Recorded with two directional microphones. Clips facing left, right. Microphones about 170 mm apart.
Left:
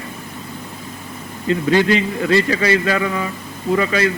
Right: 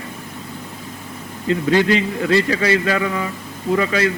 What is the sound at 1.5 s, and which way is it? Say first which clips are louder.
A man's voice: left 1 dB; 10° left (ahead or behind).